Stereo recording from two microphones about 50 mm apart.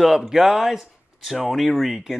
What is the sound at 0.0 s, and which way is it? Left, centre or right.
Speech, centre.